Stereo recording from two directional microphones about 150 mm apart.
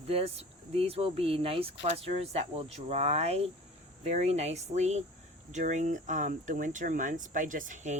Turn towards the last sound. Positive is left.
turn(degrees=-55)  # may be behind; listen again after turning